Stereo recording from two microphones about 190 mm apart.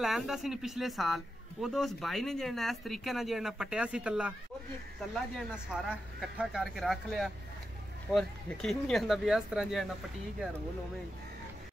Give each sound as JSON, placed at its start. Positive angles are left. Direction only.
{"t": 0.0, "sound": "a man's voice", "side_deg": 0}
{"t": 5.5, "sound": "a man's voice", "side_deg": -5}